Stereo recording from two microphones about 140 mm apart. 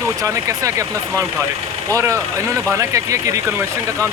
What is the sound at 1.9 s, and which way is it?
Speech, 20° right (ahead or behind).